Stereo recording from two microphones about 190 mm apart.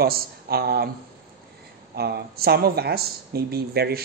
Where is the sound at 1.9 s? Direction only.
55° right (ahead or behind).